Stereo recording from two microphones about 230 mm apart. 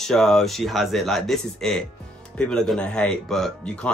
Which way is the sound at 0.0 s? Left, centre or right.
Centre.